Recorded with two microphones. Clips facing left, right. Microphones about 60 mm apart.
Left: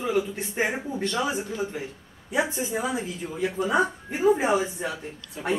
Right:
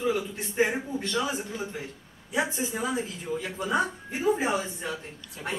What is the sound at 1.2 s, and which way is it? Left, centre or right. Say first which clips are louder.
Speech: left 4 dB; centre.